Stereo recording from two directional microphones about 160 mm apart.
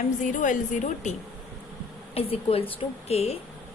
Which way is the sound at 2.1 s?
40° left (ahead or behind).